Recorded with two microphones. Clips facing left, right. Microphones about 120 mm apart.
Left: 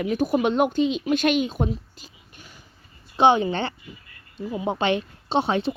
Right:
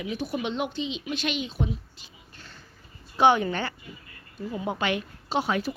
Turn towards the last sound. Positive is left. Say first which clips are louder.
# left 4 dB
turn(degrees=25)  # may be behind; listen again after turning